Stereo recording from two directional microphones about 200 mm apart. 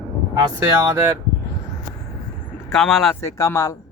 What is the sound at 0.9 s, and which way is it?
Speech, 15° right (ahead or behind).